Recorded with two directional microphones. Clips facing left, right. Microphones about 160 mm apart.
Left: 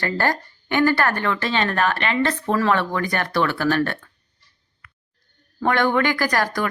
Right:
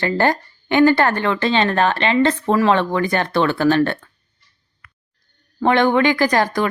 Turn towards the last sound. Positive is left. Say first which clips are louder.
# right 5 dB
turn(degrees=-20)  # may be behind; listen again after turning